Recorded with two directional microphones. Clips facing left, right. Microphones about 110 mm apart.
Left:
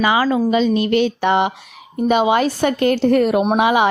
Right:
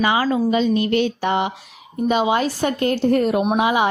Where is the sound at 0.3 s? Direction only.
90° left.